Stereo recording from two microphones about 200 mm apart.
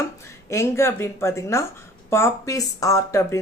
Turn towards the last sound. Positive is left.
turn(degrees=15)  # may be behind; listen again after turning